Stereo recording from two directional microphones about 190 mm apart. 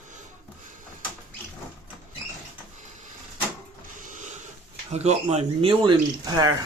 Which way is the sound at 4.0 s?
45° right (ahead or behind).